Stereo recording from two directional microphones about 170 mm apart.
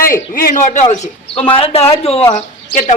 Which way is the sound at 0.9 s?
35° left (ahead or behind).